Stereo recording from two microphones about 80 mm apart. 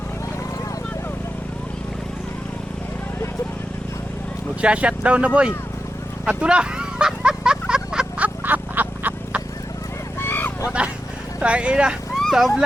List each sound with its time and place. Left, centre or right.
4.6 s speech: centre
6.2 s a sound: centre
8.4 s frog: right
10.2 s vehicle: left
10.7 s vehicle: centre
11.3 s speech: centre